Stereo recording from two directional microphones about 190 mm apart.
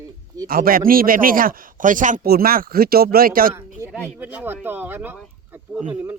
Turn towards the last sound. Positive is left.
turn(degrees=-10)  # may be behind; listen again after turning